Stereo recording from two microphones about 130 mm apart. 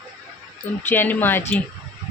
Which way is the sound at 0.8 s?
15° left (ahead or behind).